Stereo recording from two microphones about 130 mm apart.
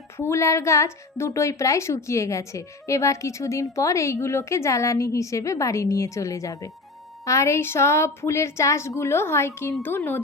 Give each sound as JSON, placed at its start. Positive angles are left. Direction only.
{"t": 0.2, "sound": "speech", "side_deg": 20}